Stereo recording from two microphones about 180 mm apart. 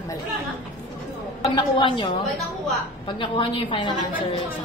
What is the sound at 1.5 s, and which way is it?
A woman's voice, 25° left (ahead or behind).